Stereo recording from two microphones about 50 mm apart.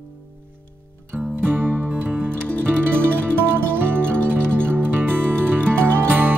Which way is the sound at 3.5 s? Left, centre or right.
Right.